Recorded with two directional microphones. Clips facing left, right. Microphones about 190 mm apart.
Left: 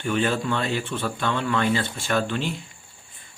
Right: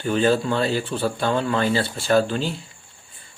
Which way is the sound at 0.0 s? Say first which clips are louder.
Right 4 dB; 35° right (ahead or behind).